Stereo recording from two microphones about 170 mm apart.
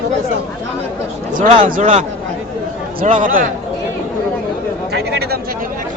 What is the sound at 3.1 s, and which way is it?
Speech, 50° right (ahead or behind).